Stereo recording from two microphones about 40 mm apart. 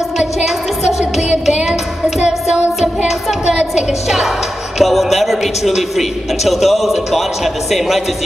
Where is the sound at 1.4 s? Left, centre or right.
Centre.